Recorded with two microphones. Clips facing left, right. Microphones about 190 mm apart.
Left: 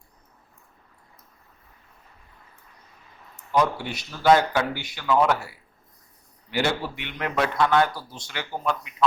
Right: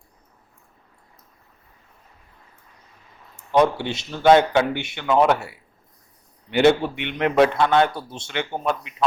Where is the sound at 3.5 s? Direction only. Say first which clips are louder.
Right 5 dB; 25° right (ahead or behind).